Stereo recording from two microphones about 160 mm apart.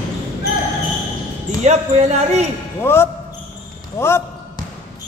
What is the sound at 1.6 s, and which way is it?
Speech, 45° right (ahead or behind).